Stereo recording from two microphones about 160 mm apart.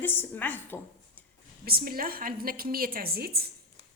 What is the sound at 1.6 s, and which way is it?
A woman's voice, 70° right (ahead or behind).